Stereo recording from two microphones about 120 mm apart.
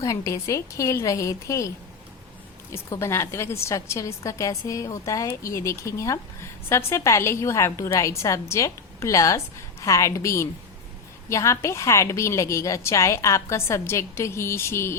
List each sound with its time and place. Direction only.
0.0 s a woman's voice: 25° left (ahead or behind)
2.7 s a woman's voice: 25° left (ahead or behind)